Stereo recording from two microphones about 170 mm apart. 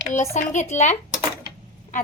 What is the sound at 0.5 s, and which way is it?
Speech, 45° left (ahead or behind).